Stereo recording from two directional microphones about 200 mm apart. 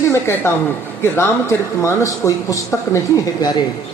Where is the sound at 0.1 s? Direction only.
10° left (ahead or behind).